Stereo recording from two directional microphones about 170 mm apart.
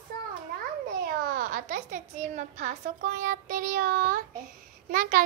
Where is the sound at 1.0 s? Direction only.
55° right (ahead or behind).